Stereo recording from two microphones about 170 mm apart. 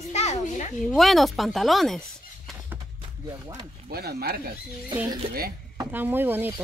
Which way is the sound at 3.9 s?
65° right (ahead or behind).